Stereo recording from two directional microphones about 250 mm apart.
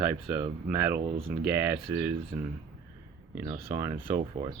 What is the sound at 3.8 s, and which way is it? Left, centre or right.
Speech, centre.